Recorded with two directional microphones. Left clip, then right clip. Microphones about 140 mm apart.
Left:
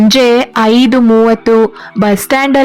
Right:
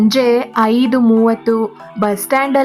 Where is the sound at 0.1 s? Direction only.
35° left (ahead or behind).